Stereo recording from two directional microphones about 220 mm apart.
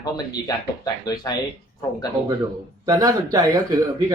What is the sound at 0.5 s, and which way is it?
Speech, 15° left (ahead or behind).